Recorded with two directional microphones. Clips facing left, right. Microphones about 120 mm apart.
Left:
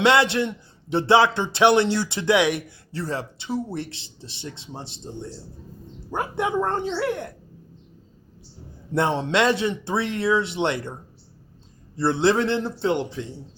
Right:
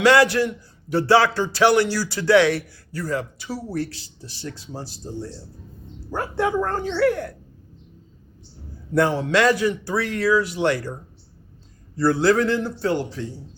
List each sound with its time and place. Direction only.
0.0 s a man's voice: 25° left (ahead or behind)
9.0 s a man's voice: 25° left (ahead or behind)
11.9 s a man's voice: 25° left (ahead or behind)